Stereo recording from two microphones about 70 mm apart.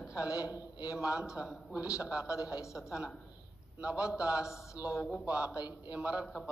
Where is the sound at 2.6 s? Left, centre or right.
Left.